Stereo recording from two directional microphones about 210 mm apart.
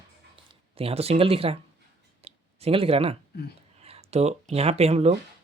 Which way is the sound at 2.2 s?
25° right (ahead or behind).